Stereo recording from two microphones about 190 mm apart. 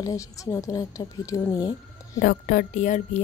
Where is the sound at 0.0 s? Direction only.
15° left (ahead or behind).